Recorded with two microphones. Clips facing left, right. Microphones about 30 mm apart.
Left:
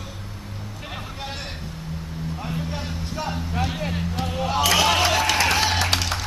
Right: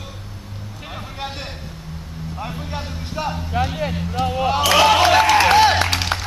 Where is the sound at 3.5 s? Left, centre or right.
Right.